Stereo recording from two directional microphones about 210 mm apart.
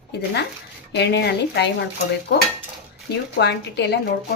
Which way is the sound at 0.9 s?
55° left (ahead or behind).